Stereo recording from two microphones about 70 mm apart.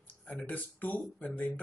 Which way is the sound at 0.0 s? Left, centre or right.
Left.